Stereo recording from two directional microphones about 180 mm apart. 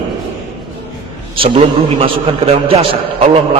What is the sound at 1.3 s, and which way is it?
A man's voice, 30° right (ahead or behind).